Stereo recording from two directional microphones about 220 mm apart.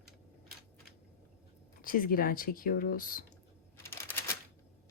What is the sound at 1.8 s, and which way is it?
Speech, 40° left (ahead or behind).